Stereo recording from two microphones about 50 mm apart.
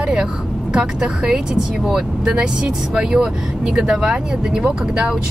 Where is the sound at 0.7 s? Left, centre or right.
Right.